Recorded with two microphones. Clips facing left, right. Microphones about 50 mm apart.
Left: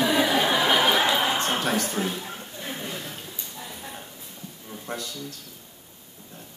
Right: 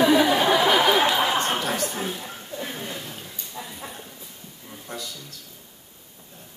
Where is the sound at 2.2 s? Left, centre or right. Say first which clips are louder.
Right 2 dB; centre.